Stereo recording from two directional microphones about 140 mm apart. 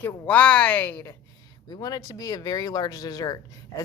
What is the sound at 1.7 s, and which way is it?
Speech, 25° left (ahead or behind).